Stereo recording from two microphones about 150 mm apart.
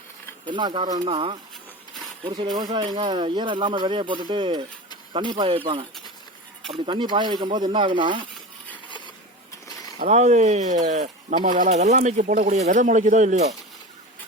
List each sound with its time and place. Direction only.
0.4 s speech: 30° right (ahead or behind)
0.9 s speech: 45° right (ahead or behind)
6.7 s speech: 35° right (ahead or behind)
10.0 s speech: 50° right (ahead or behind)